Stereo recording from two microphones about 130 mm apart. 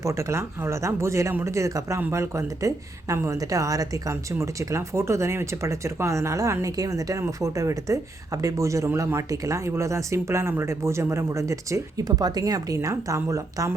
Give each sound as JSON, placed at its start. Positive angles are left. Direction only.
{"t": 0.0, "sound": "speech", "side_deg": -20}